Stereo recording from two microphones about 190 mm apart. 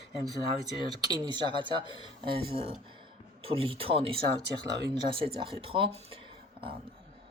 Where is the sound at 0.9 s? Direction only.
25° right (ahead or behind).